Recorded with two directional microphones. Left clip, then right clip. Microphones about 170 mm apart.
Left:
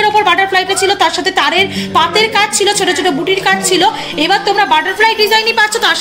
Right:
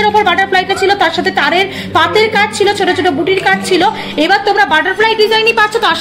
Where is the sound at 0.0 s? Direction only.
45° right (ahead or behind).